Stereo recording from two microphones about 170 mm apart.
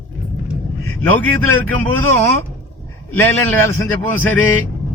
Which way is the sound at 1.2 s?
10° left (ahead or behind).